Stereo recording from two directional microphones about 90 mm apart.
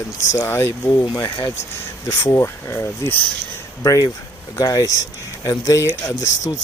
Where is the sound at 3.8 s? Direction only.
40° left (ahead or behind).